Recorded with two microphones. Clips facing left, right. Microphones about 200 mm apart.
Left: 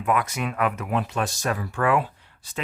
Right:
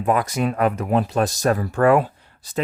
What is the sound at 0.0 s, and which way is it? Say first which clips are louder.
Speech: right 5 dB; 35° right (ahead or behind).